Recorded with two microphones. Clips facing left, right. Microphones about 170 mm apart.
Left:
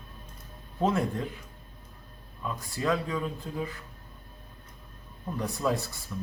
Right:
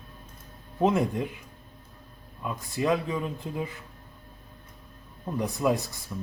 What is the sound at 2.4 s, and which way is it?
A man's voice, 15° right (ahead or behind).